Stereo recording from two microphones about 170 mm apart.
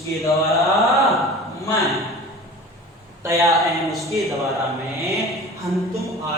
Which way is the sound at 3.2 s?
20° right (ahead or behind).